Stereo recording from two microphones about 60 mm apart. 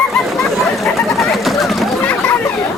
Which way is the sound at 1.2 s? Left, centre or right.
Centre.